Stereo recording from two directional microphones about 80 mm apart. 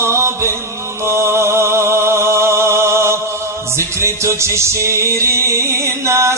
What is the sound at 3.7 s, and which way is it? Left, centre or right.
Music, right.